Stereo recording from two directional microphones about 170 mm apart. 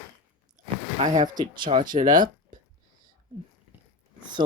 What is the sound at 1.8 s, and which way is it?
Speech, 55° right (ahead or behind).